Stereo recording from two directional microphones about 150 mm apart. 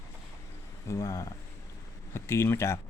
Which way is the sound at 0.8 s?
20° left (ahead or behind).